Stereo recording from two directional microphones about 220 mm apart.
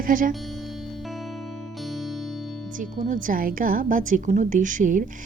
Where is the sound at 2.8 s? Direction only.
35° right (ahead or behind).